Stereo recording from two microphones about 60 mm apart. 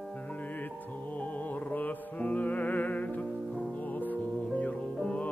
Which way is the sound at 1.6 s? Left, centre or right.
Left.